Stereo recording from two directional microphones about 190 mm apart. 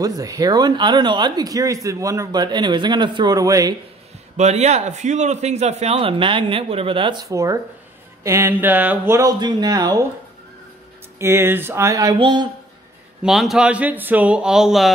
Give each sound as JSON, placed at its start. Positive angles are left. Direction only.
{"t": 0.0, "sound": "speech", "side_deg": -20}
{"t": 4.4, "sound": "a man's voice", "side_deg": -35}
{"t": 11.1, "sound": "speech", "side_deg": -15}
{"t": 13.2, "sound": "a man's voice", "side_deg": 0}